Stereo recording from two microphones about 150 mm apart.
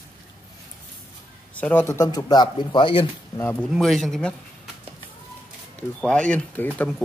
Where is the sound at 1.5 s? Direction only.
10° left (ahead or behind); by 3.0 s 35° left (ahead or behind).